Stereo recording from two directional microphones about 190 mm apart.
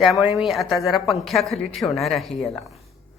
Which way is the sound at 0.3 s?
Centre (ahead or behind).